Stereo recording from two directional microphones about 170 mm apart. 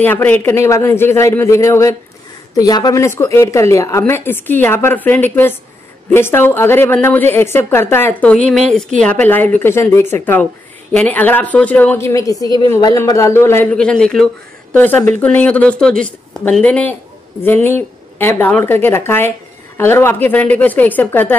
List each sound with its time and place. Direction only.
0.0 s speech: 10° left (ahead or behind)
13.7 s speech: 5° left (ahead or behind)